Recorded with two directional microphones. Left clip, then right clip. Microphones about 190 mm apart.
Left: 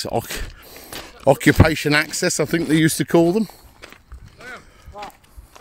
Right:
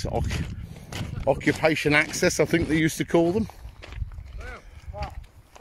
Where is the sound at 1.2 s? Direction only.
45° left (ahead or behind); by 3.5 s 20° left (ahead or behind).